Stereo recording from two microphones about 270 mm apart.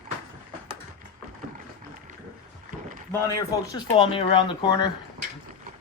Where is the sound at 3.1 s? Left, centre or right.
Centre.